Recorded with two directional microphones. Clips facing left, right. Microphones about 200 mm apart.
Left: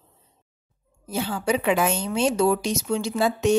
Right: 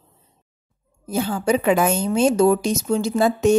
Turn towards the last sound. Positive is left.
turn(degrees=-45)  # may be behind; listen again after turning